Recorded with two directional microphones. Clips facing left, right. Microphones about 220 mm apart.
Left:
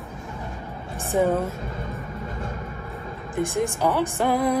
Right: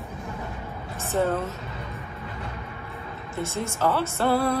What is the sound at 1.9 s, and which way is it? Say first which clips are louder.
Vehicle: left 4 dB; 45° left (ahead or behind).